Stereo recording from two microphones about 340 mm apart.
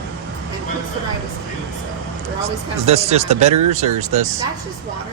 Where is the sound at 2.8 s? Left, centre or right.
Centre.